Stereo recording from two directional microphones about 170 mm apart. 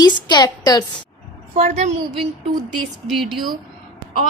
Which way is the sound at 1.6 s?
40° right (ahead or behind).